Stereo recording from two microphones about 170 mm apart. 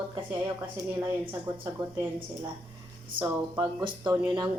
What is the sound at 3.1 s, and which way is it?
Speech, 25° right (ahead or behind).